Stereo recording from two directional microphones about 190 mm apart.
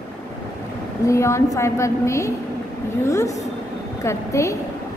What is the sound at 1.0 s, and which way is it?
A woman's voice, 15° left (ahead or behind).